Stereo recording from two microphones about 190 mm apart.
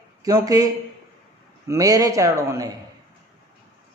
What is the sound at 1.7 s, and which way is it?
A man's voice, 20° right (ahead or behind).